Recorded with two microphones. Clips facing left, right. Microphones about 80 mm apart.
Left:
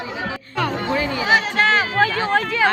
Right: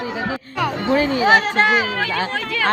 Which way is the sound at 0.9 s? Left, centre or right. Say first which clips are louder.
Right 4 dB; right.